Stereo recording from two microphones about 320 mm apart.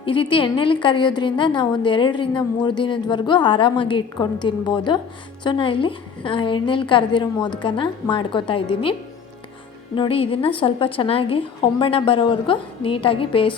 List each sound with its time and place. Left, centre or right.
0.0 s a woman's voice: centre